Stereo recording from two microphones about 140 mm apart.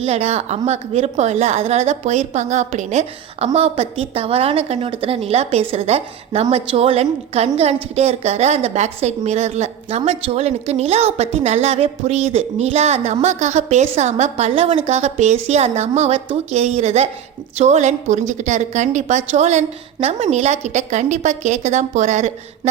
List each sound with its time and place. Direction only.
0.0 s a woman's voice: 50° right (ahead or behind)